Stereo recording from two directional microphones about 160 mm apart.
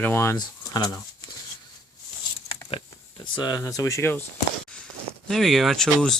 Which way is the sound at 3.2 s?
25° left (ahead or behind).